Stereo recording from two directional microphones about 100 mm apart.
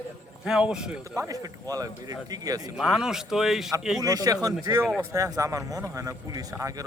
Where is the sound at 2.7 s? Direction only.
5° right (ahead or behind).